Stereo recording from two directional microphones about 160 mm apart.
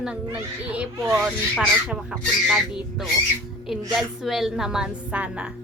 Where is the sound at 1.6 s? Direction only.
Centre (ahead or behind).